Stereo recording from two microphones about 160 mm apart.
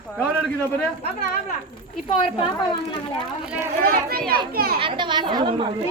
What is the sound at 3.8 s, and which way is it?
Speech, 70° right (ahead or behind).